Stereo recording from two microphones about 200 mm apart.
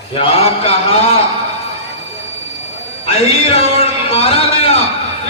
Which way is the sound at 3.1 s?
30° left (ahead or behind).